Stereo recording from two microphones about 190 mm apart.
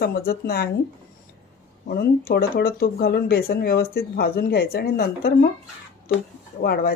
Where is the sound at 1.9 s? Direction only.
55° left (ahead or behind).